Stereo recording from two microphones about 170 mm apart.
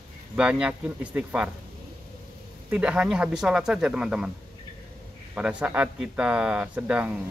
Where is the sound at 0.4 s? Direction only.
5° right (ahead or behind).